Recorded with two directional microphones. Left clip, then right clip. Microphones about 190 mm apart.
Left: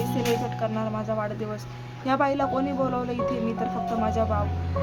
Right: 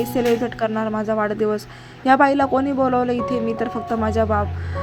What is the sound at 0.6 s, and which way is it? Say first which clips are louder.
Speech: right 7 dB; 25° right (ahead or behind).